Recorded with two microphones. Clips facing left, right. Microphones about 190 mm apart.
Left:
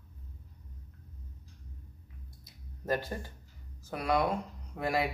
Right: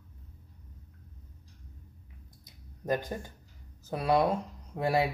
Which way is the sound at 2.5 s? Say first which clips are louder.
Right 2 dB; 20° right (ahead or behind).